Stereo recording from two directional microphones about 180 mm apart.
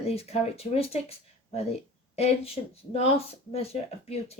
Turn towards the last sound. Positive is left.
turn(degrees=35)  # may be behind; listen again after turning